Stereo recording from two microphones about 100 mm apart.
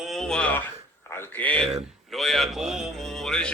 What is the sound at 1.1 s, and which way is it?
Speech, 20° left (ahead or behind).